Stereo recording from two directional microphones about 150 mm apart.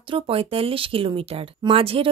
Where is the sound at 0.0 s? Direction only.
35° right (ahead or behind).